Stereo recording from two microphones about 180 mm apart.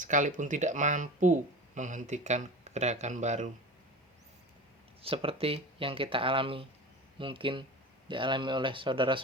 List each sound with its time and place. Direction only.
0.0 s speech: 45° right (ahead or behind)
5.0 s speech: 30° right (ahead or behind)